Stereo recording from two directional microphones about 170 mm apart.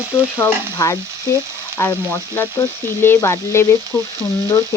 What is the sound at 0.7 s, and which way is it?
Stir, 20° left (ahead or behind).